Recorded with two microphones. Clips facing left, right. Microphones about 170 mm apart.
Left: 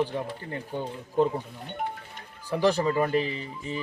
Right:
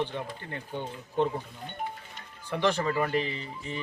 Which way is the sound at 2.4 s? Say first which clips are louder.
Left 4 dB; 35° left (ahead or behind).